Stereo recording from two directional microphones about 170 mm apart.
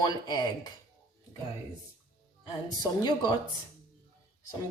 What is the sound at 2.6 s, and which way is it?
Speech, 25° left (ahead or behind).